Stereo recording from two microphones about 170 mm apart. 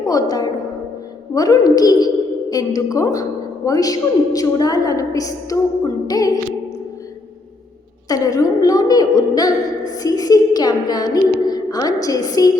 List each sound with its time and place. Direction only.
0.1 s a woman's voice: 20° left (ahead or behind)
8.0 s a woman's voice: 20° left (ahead or behind)